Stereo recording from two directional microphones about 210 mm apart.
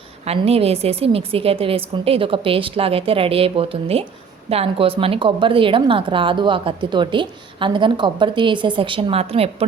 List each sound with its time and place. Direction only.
0.3 s a woman's voice: 30° right (ahead or behind)